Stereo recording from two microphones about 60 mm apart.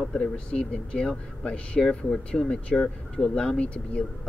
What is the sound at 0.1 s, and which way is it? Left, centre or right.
Speech, centre.